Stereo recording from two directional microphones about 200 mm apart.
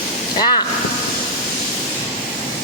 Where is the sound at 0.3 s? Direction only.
20° left (ahead or behind).